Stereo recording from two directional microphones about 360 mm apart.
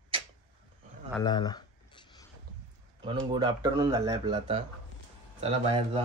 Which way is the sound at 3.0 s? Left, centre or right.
Centre.